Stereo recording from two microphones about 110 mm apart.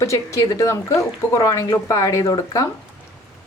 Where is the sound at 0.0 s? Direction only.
30° left (ahead or behind).